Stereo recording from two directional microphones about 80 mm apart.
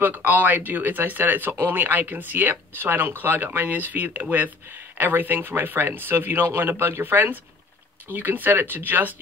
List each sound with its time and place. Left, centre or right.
0.0 s speech: right